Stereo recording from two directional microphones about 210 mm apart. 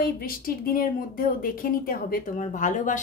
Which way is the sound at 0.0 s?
45° left (ahead or behind).